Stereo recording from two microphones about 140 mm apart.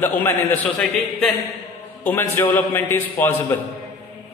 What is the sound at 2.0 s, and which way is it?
A man's voice, 15° left (ahead or behind).